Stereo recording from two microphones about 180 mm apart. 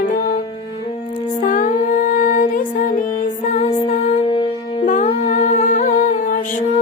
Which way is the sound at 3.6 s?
35° left (ahead or behind).